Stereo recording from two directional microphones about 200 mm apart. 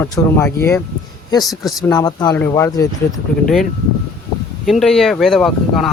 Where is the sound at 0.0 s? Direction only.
10° left (ahead or behind).